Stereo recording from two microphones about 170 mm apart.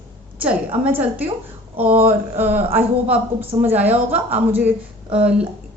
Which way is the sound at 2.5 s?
40° right (ahead or behind).